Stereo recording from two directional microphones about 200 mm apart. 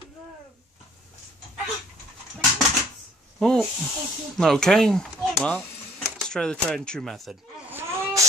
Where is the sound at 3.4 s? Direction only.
5° left (ahead or behind).